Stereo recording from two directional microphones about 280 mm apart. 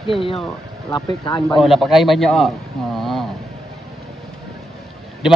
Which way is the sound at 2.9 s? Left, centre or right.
Centre.